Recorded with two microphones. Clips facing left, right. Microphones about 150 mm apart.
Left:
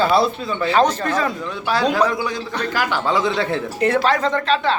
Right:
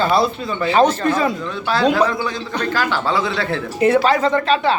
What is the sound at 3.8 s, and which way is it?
Speech, 5° right (ahead or behind).